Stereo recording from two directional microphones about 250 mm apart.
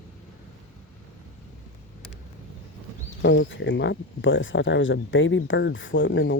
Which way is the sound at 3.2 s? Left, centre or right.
Left.